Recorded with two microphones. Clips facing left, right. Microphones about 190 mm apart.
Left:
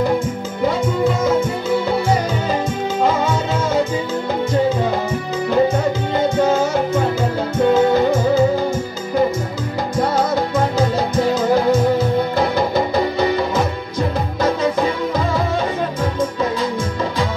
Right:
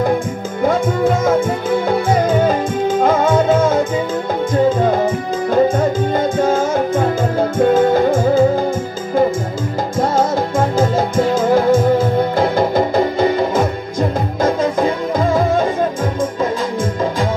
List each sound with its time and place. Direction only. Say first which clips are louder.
0.6 s music: right 3 dB; 50° right (ahead or behind)
9.9 s music: right 2 dB; 45° right (ahead or behind)